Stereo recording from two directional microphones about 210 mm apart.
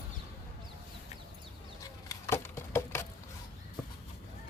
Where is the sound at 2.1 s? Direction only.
15° left (ahead or behind).